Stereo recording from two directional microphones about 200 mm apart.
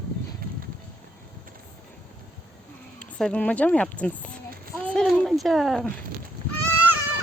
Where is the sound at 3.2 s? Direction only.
5° left (ahead or behind).